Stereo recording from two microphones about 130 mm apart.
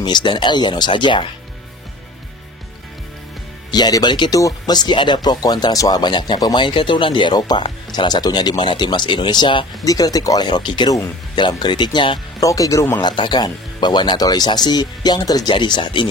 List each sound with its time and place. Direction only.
0.0 s speech: 35° left (ahead or behind)
3.7 s speech: 30° left (ahead or behind)
12.4 s speech: 25° left (ahead or behind)
13.0 s speech: 35° left (ahead or behind)